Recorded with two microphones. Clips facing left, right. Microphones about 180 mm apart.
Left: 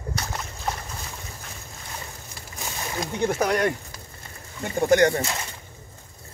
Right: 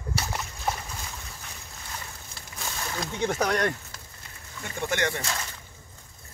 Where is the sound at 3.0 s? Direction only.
10° left (ahead or behind).